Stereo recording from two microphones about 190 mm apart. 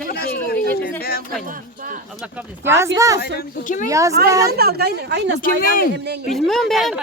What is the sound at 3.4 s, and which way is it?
Speech, 45° left (ahead or behind).